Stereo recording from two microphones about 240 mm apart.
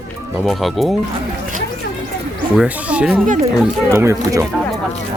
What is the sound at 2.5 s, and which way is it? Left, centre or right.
Speech, centre.